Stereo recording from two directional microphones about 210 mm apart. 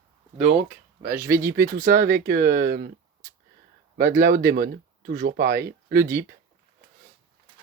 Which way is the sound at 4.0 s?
40° right (ahead or behind).